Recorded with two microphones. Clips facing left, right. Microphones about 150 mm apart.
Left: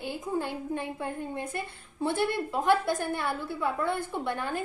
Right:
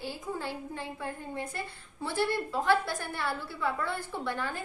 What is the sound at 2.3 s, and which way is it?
Speech, 20° left (ahead or behind).